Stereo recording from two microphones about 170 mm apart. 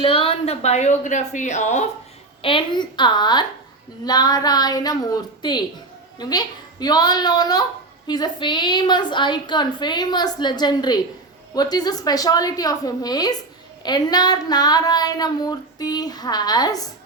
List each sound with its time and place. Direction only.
0.0 s a woman's voice: 30° left (ahead or behind)
2.4 s child singing: 30° left (ahead or behind)